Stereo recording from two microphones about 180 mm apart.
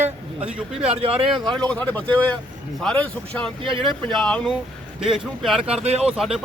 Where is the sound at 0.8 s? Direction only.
35° right (ahead or behind).